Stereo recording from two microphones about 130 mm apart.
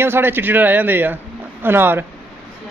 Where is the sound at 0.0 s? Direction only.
15° right (ahead or behind).